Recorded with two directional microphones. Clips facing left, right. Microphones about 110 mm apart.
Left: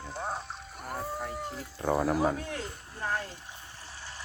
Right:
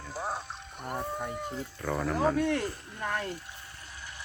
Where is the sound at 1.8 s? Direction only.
40° left (ahead or behind).